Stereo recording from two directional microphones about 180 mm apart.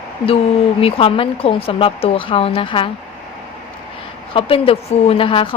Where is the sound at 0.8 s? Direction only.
30° left (ahead or behind).